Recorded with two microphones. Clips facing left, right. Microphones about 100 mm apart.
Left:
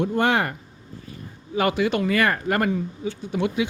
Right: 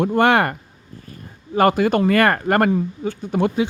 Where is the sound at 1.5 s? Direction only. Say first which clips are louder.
Right 6 dB; 45° right (ahead or behind).